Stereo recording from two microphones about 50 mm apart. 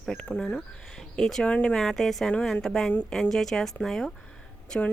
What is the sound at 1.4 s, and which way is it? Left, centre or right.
Speech, left.